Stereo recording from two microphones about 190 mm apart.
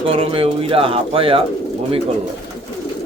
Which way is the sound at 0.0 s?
30° right (ahead or behind).